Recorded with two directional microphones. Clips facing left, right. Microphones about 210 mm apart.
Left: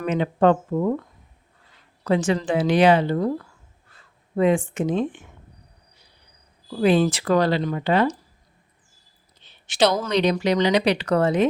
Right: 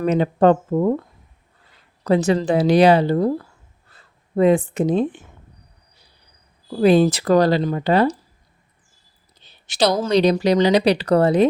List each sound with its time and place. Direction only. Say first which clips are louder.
0.0 s speech: right 3 dB; 40° right (ahead or behind)
2.0 s speech: right 4 dB; 40° right (ahead or behind)
6.7 s speech: right 4 dB; 40° right (ahead or behind)
9.4 s a sound: even; 35° right (ahead or behind)
10.0 s speech: right 5 dB; 35° right (ahead or behind)